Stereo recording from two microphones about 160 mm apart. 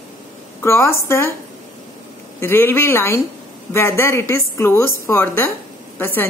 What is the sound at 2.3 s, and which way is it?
A woman's voice, 15° left (ahead or behind).